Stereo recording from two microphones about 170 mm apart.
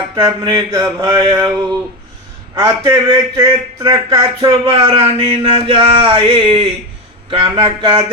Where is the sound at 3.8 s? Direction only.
25° right (ahead or behind).